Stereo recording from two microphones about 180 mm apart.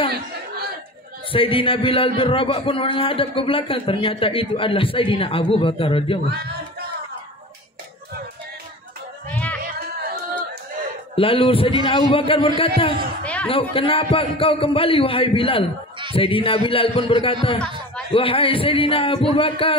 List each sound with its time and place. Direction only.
1.3 s a man's voice: 30° left (ahead or behind)
9.3 s music: 10° left (ahead or behind)
11.1 s a man's voice: 30° left (ahead or behind)
13.2 s a sound: 5° left (ahead or behind)
13.5 s a man's voice: 30° left (ahead or behind)